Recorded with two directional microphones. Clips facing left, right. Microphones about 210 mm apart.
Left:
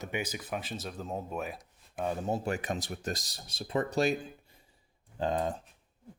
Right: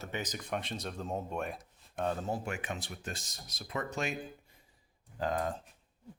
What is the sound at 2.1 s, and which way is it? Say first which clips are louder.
Speech: left 3 dB; 15° left (ahead or behind).